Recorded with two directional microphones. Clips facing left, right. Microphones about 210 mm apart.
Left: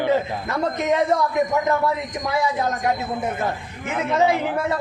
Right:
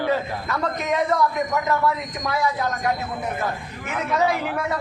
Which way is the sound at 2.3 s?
20° left (ahead or behind).